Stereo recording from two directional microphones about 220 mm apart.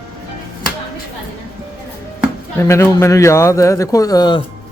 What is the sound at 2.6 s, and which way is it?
A man's voice, 10° left (ahead or behind).